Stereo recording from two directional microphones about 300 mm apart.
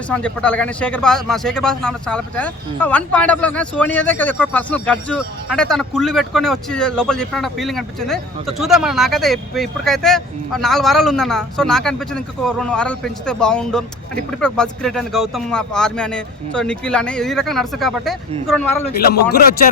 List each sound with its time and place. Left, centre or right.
0.1 s speech: centre
19.0 s speech: left